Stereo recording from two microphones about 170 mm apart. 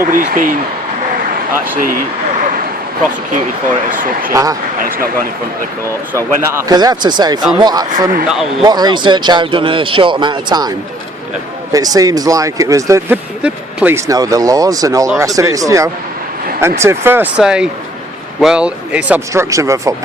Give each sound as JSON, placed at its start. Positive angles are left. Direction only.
{"t": 0.0, "sound": "speech", "side_deg": -55}
{"t": 3.8, "sound": "speech", "side_deg": -50}
{"t": 4.3, "sound": "speech", "side_deg": -20}
{"t": 6.1, "sound": "speech", "side_deg": -20}